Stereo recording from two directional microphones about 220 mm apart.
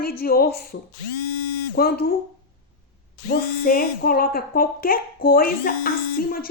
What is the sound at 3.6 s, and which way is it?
Speech, 40° left (ahead or behind).